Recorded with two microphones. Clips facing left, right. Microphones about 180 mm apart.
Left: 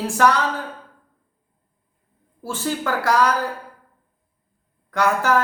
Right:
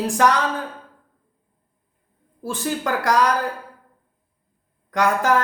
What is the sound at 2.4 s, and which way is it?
Speech, 15° right (ahead or behind).